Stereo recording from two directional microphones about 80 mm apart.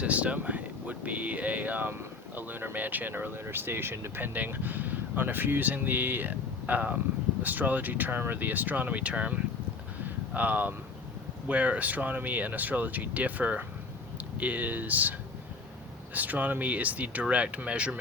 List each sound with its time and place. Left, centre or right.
0.0 s speech: centre
16.1 s speech: right